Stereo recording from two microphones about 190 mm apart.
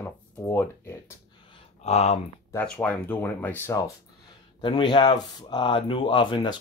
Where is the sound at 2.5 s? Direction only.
5° left (ahead or behind).